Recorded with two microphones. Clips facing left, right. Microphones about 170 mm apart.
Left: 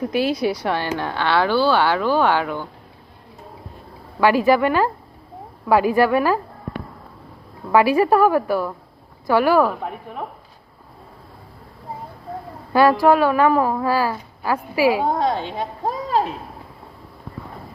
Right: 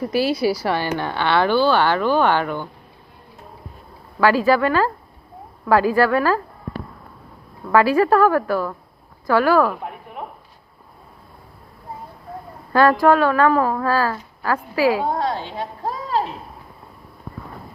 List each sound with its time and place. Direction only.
0.0 s speech: centre (ahead or behind)
4.2 s a woman's voice: 15° left (ahead or behind)
7.7 s a woman's voice: 15° left (ahead or behind)
12.7 s a woman's voice: 10° left (ahead or behind)